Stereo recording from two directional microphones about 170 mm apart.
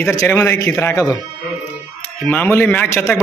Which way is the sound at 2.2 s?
10° left (ahead or behind).